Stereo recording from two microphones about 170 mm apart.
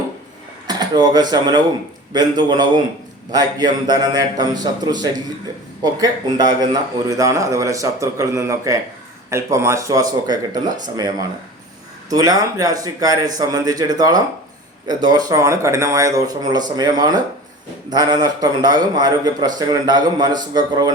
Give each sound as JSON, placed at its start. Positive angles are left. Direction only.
{"t": 0.7, "sound": "speech", "side_deg": -25}